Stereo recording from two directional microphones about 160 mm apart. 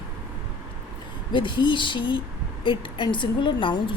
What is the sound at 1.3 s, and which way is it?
A woman's voice, 30° left (ahead or behind).